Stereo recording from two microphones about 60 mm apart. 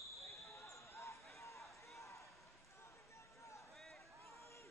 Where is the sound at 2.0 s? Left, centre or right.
Left.